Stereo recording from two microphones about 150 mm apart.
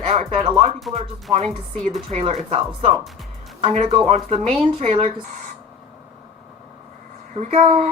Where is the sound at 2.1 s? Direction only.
40° right (ahead or behind).